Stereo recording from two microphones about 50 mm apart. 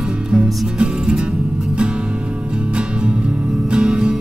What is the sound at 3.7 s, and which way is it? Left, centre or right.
Music, centre.